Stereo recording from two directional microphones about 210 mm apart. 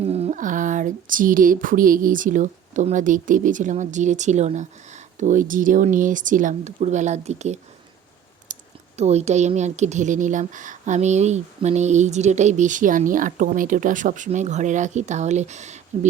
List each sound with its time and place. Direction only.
0.0 s a woman's voice: 30° right (ahead or behind)
8.5 s a sound: 35° right (ahead or behind)
9.0 s a woman's voice: 30° right (ahead or behind)